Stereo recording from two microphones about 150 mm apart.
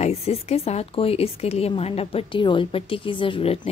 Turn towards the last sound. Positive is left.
turn(degrees=35)  # may be behind; listen again after turning